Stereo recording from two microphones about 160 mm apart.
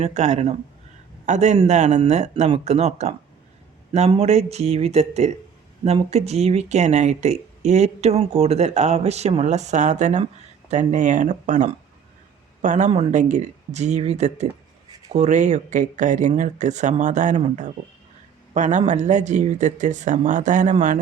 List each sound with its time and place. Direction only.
0.0 s a man's voice: 45° right (ahead or behind)